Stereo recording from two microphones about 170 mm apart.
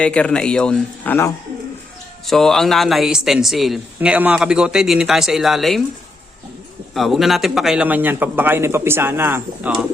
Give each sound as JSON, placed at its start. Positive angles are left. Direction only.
{"t": 0.0, "sound": "speech", "side_deg": 5}
{"t": 6.9, "sound": "a man's voice", "side_deg": 0}